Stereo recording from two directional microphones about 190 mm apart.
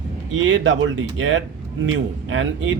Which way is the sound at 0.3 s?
70° right (ahead or behind).